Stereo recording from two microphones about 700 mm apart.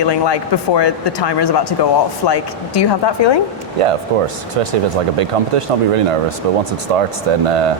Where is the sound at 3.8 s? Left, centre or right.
Right.